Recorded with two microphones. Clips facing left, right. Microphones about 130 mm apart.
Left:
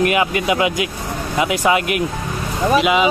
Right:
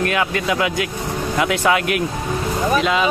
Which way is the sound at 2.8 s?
10° left (ahead or behind).